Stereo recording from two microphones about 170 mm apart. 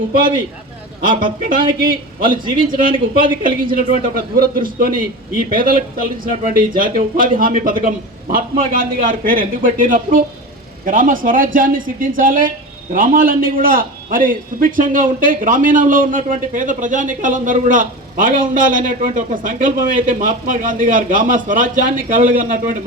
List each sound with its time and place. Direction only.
1.0 s a man's voice: 55° right (ahead or behind)